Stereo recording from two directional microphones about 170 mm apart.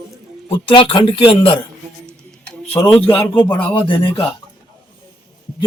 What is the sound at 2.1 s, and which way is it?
Tick-tock, 5° left (ahead or behind).